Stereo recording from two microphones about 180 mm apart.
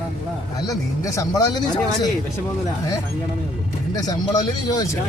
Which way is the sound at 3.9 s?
20° left (ahead or behind).